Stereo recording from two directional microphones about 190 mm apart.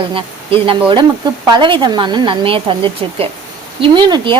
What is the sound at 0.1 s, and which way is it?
Speech, 30° right (ahead or behind).